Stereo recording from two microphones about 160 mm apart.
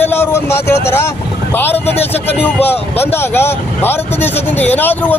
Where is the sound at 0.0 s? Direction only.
15° left (ahead or behind).